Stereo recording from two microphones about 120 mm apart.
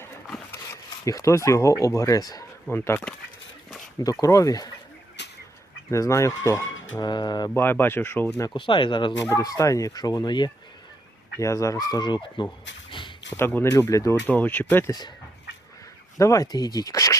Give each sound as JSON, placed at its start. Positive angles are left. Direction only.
{"t": 0.5, "sound": "speech", "side_deg": 25}
{"t": 2.6, "sound": "speech", "side_deg": 20}
{"t": 4.0, "sound": "speech", "side_deg": 30}
{"t": 5.9, "sound": "speech", "side_deg": 25}
{"t": 7.5, "sound": "speech", "side_deg": 15}
{"t": 8.5, "sound": "speech", "side_deg": 45}
{"t": 9.3, "sound": "speech", "side_deg": 30}
{"t": 11.3, "sound": "speech", "side_deg": 25}
{"t": 12.9, "sound": "a sound", "side_deg": 45}
{"t": 13.3, "sound": "speech", "side_deg": 20}
{"t": 14.3, "sound": "speech", "side_deg": 15}
{"t": 16.1, "sound": "speech", "side_deg": 25}